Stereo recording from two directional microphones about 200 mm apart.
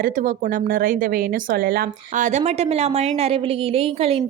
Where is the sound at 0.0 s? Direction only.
40° right (ahead or behind).